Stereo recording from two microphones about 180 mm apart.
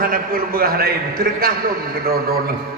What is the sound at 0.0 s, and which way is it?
A man's voice, 55° right (ahead or behind).